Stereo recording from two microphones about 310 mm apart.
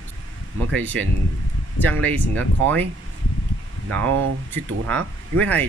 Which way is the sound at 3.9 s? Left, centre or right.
Right.